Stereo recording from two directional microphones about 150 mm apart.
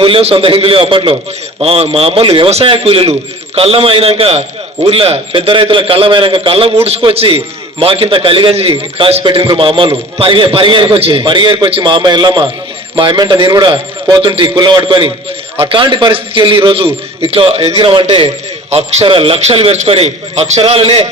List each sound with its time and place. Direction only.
0.0 s a man's voice: 40° right (ahead or behind)
18.7 s a man's voice: 45° right (ahead or behind)